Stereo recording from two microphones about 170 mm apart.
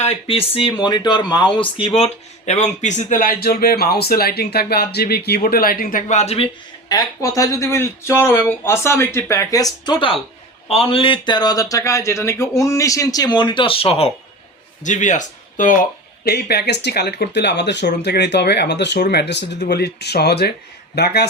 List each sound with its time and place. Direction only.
0.0 s a man's voice: 35° left (ahead or behind)
2.5 s a man's voice: 45° left (ahead or behind)
14.8 s speech: 45° left (ahead or behind); by 19.5 s 90° left
19.5 s speech: 65° left (ahead or behind)